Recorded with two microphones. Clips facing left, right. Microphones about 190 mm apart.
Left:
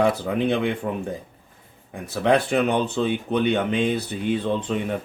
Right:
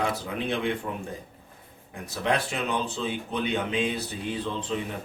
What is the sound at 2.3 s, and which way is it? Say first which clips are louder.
Speech: left 11 dB; 65° left (ahead or behind).